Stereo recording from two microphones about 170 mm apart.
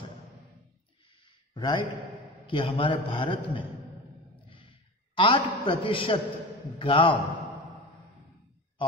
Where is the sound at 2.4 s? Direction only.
30° left (ahead or behind).